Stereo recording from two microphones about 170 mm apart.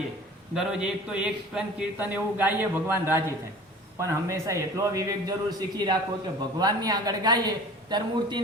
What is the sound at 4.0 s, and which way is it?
A man's voice, 20° right (ahead or behind).